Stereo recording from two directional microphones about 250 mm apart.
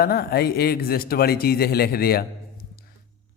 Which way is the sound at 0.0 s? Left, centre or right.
Left.